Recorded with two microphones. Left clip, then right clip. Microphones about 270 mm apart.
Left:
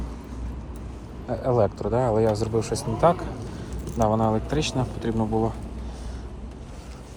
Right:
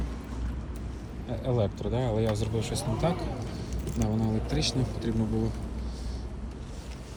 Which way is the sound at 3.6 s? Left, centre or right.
Centre.